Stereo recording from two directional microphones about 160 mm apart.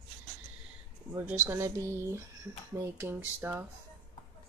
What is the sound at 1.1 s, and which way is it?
Speech, 10° right (ahead or behind).